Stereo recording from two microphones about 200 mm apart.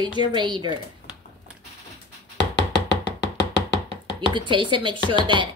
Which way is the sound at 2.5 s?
60° left (ahead or behind).